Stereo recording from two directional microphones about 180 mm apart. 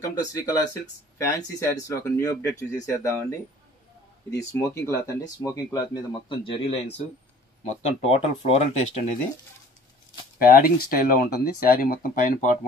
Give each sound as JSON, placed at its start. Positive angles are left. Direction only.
{"t": 0.0, "sound": "speech", "side_deg": 20}
{"t": 10.4, "sound": "speech", "side_deg": 55}